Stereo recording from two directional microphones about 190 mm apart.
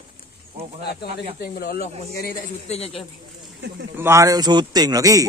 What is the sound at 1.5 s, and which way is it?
Speech, 50° left (ahead or behind).